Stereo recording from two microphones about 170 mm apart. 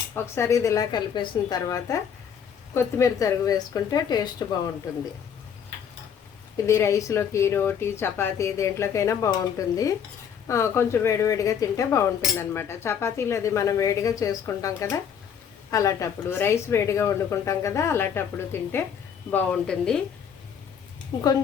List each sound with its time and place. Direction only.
0.1 s a woman's voice: 15° left (ahead or behind)
6.7 s speech: 15° left (ahead or behind)